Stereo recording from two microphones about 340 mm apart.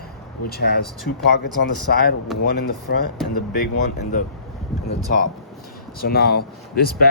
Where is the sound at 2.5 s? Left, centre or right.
Left.